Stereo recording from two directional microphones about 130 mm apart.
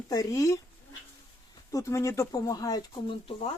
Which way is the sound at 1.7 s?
25° left (ahead or behind).